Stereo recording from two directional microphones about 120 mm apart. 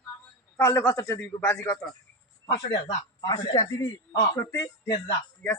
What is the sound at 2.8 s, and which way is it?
Speech, 40° left (ahead or behind).